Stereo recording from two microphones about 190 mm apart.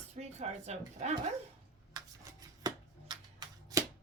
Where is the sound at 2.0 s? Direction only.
20° right (ahead or behind).